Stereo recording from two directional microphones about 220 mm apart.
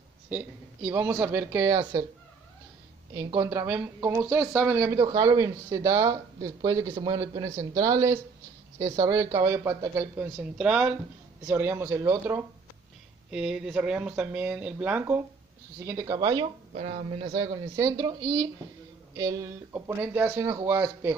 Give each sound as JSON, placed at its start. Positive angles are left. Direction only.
{"t": 0.3, "sound": "speech", "side_deg": -10}
{"t": 1.7, "sound": "a woman's voice", "side_deg": -25}
{"t": 3.1, "sound": "a woman's voice", "side_deg": -15}